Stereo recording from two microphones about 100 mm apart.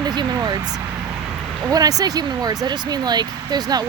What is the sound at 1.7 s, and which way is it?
Speech, 40° right (ahead or behind).